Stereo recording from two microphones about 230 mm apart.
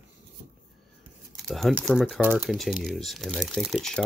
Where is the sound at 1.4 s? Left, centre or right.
Centre.